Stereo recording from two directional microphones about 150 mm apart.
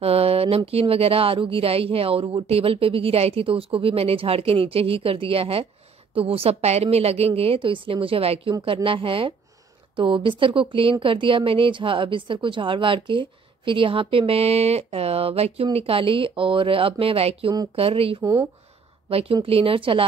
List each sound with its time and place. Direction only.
0.0 s speech: 40° right (ahead or behind)
18.2 s speech: 25° right (ahead or behind)
19.0 s speech: 40° right (ahead or behind)